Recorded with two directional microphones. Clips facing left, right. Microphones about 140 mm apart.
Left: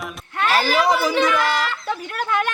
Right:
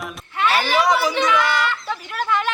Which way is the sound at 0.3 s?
40° left (ahead or behind).